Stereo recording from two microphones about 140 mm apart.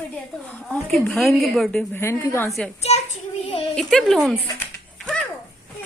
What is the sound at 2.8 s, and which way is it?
Speech, 50° left (ahead or behind).